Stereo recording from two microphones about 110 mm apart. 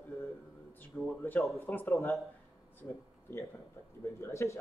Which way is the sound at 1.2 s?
20° left (ahead or behind).